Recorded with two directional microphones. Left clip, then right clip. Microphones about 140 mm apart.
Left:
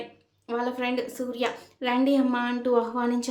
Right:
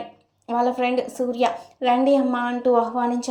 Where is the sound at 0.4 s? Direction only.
25° right (ahead or behind).